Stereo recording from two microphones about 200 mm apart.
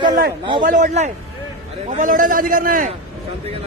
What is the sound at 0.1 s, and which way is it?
A man's voice, 45° right (ahead or behind).